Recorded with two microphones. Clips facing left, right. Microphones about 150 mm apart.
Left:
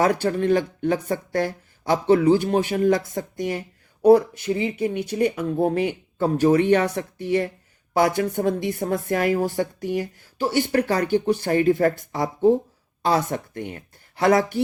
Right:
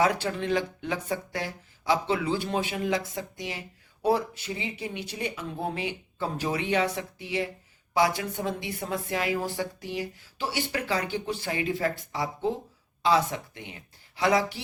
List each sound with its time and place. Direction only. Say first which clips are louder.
0.0 s speech: left 5 dB; 45° left (ahead or behind)